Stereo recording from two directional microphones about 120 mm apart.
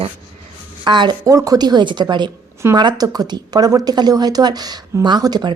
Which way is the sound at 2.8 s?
35° right (ahead or behind).